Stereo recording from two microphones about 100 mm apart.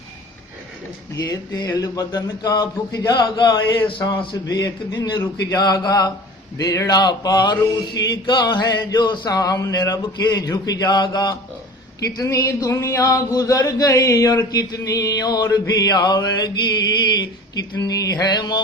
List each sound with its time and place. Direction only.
1.1 s speech: 35° left (ahead or behind)
4.4 s mantra: 40° left (ahead or behind)
5.5 s speech: 40° left (ahead or behind)
6.6 s mantra: 40° left (ahead or behind)
12.0 s speech: 35° left (ahead or behind)